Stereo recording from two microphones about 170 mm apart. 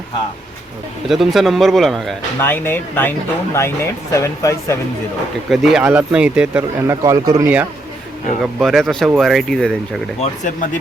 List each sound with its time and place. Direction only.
1.0 s a man's voice: centre (ahead or behind)
2.4 s speech: 10° left (ahead or behind)
5.5 s speech: 5° right (ahead or behind)
8.4 s a man's voice: centre (ahead or behind)
10.2 s speech: 45° left (ahead or behind)